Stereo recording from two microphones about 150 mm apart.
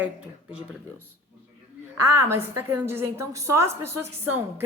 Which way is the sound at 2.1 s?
15° right (ahead or behind).